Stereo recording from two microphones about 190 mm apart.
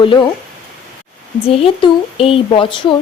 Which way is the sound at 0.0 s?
25° left (ahead or behind).